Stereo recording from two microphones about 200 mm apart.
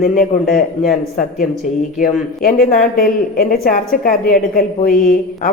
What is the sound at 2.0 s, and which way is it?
Speech, 45° left (ahead or behind).